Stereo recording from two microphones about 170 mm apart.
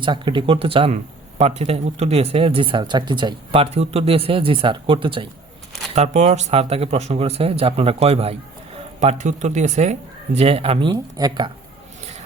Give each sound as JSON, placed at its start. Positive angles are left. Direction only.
{"t": 0.0, "sound": "speech", "side_deg": -30}
{"t": 5.9, "sound": "speech", "side_deg": -40}